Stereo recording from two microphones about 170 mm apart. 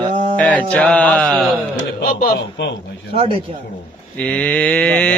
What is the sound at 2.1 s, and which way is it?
Speech, 55° left (ahead or behind).